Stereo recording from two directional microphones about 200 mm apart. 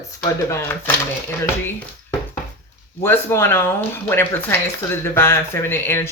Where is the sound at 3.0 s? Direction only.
10° left (ahead or behind).